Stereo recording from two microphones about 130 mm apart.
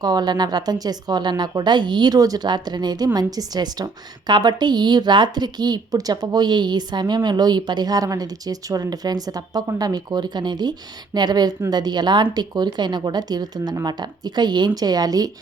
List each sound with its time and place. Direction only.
0.0 s speech: 30° right (ahead or behind)